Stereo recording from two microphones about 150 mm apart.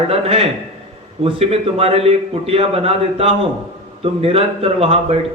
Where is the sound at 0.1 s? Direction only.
40° right (ahead or behind).